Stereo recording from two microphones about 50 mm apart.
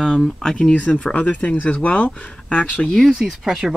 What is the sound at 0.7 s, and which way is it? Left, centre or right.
Speech, left.